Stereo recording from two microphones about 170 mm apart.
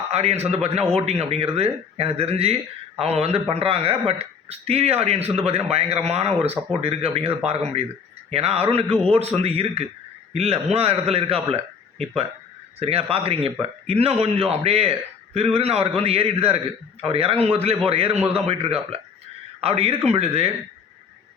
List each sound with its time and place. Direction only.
0.1 s a man's voice: 40° right (ahead or behind)